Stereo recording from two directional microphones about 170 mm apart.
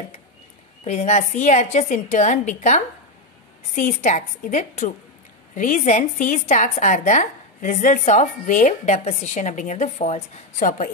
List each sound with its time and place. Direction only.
0.8 s a woman's voice: 40° left (ahead or behind)
10.6 s a woman's voice: 50° left (ahead or behind)